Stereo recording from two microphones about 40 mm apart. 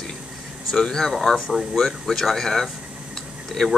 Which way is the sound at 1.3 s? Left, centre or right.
Centre.